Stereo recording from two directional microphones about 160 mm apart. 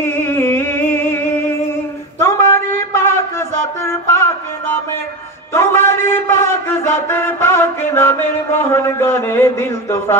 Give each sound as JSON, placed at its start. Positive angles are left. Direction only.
{"t": 0.0, "sound": "music", "side_deg": 15}
{"t": 2.1, "sound": "a sound", "side_deg": 15}
{"t": 5.5, "sound": "a man's voice", "side_deg": 15}